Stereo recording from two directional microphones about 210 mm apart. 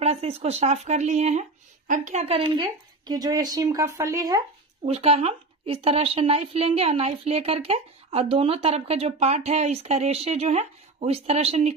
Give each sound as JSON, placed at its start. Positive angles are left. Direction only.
{"t": 0.0, "sound": "speech", "side_deg": -30}
{"t": 4.8, "sound": "speech", "side_deg": -30}